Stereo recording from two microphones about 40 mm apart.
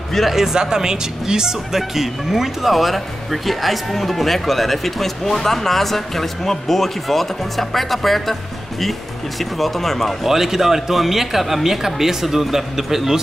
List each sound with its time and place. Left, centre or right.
0.3 s speech: centre
9.4 s speech: centre
10.2 s speech: centre